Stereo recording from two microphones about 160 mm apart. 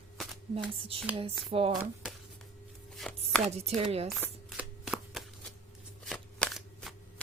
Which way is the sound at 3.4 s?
40° right (ahead or behind).